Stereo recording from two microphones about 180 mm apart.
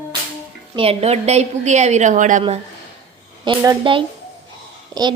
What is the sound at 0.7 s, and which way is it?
A woman's voice, 35° right (ahead or behind).